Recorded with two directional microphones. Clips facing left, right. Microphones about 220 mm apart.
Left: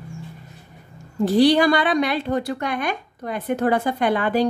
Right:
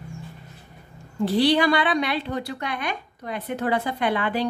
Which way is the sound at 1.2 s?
45° left (ahead or behind).